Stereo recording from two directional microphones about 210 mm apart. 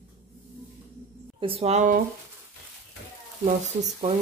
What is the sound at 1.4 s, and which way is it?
Speech, 25° right (ahead or behind).